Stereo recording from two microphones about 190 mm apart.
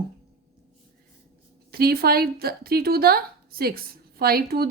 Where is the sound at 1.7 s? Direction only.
55° right (ahead or behind).